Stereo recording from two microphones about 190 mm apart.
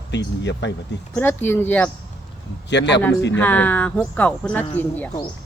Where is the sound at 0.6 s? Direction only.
65° left (ahead or behind).